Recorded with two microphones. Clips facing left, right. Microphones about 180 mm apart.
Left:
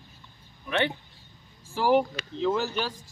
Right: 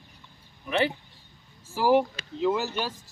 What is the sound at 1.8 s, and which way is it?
Speech, 5° right (ahead or behind).